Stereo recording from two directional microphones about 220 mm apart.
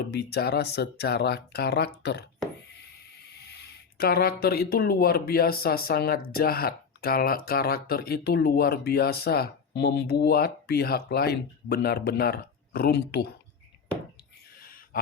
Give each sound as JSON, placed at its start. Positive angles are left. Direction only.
{"t": 0.1, "sound": "speech", "side_deg": 45}
{"t": 3.4, "sound": "speech", "side_deg": 45}
{"t": 14.6, "sound": "a sound", "side_deg": 40}